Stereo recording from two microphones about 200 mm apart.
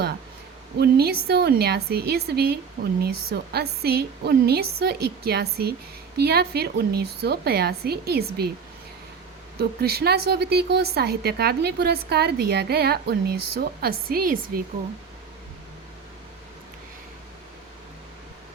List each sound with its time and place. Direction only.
0.8 s a woman's voice: 50° right (ahead or behind)
9.6 s a woman's voice: 50° right (ahead or behind)